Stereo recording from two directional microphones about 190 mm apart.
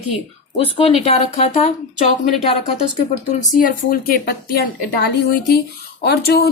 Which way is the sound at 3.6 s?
50° left (ahead or behind).